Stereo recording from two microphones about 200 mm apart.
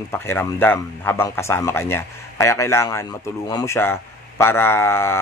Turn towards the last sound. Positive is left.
turn(degrees=10)  # may be behind; listen again after turning